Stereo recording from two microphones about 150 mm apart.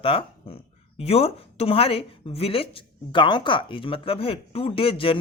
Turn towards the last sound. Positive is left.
turn(degrees=35)  # may be behind; listen again after turning